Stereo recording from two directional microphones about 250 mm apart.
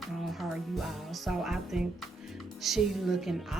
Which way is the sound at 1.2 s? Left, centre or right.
Centre.